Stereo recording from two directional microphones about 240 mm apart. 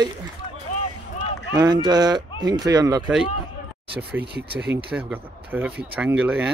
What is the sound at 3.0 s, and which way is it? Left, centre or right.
Speech, centre.